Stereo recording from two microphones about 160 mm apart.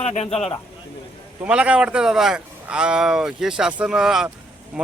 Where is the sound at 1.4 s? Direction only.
5° right (ahead or behind).